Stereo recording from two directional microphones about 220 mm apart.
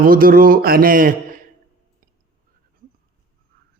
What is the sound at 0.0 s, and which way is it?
Speech, 40° right (ahead or behind).